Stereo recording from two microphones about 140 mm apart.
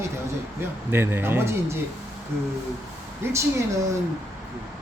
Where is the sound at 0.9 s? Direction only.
15° right (ahead or behind).